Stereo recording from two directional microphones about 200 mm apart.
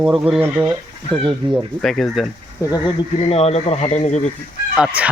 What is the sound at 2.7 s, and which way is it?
Speech, 25° left (ahead or behind).